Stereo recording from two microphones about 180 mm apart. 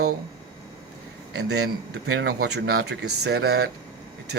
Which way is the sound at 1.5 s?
70° right (ahead or behind).